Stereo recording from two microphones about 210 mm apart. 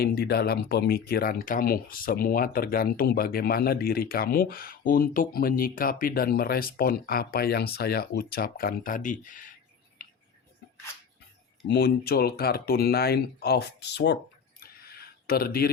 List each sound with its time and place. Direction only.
0.0 s speech: 45° left (ahead or behind)
11.7 s speech: 50° left (ahead or behind)
14.6 s a sound: 45° left (ahead or behind)